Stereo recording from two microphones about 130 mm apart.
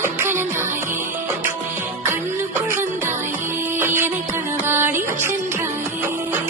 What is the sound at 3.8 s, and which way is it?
Music, 20° right (ahead or behind).